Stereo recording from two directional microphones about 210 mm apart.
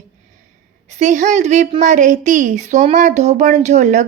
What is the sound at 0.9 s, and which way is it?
A woman's voice, 35° right (ahead or behind).